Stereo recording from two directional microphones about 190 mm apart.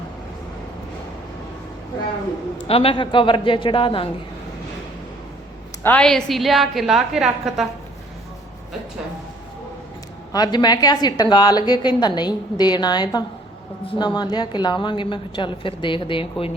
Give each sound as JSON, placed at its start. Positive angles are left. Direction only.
{"t": 2.6, "sound": "a woman's voice", "side_deg": 30}
{"t": 5.8, "sound": "a woman's voice", "side_deg": 5}
{"t": 10.3, "sound": "a woman's voice", "side_deg": 20}